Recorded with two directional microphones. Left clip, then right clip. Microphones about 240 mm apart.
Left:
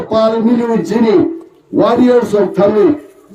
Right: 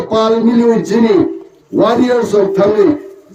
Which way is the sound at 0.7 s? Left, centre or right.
Left.